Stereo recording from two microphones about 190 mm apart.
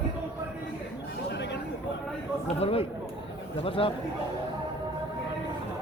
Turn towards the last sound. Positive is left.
turn(degrees=30)  # may be behind; listen again after turning